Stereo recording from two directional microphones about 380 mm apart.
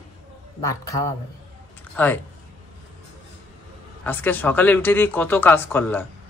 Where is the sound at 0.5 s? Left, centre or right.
Centre.